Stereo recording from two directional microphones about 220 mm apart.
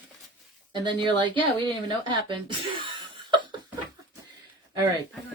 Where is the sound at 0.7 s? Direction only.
20° right (ahead or behind).